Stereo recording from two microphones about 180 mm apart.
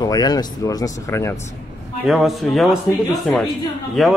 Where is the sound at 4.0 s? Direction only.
Centre (ahead or behind).